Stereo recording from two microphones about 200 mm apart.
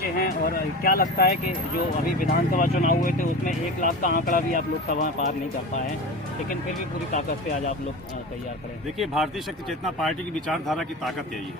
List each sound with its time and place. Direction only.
0.0 s speech: 45° left (ahead or behind)
7.1 s speech: 35° left (ahead or behind)
9.0 s speech: centre (ahead or behind)